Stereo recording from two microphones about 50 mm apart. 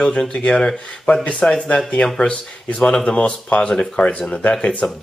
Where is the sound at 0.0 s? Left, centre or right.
Centre.